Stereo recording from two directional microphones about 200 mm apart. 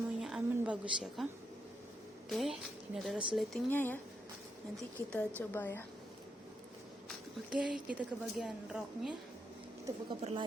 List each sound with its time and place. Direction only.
0.2 s a sound: 5° right (ahead or behind)
2.3 s a woman's voice: centre (ahead or behind)
5.1 s speech: 10° left (ahead or behind)
7.5 s a woman's voice: 5° right (ahead or behind)
10.2 s a woman's voice: 30° right (ahead or behind)